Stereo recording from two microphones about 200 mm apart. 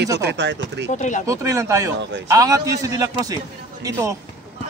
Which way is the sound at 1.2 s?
15° right (ahead or behind).